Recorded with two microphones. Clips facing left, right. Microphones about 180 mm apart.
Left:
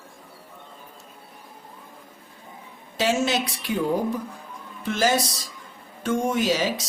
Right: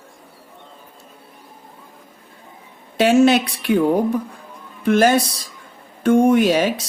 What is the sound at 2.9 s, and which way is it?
Speech, 60° right (ahead or behind).